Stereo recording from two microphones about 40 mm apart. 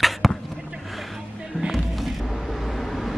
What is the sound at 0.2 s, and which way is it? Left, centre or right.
Basketball bounce, centre.